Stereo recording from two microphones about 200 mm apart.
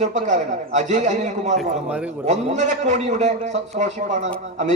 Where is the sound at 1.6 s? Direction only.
5° right (ahead or behind).